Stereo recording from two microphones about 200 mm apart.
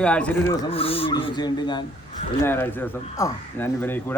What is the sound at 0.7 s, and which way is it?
Speech, 30° left (ahead or behind).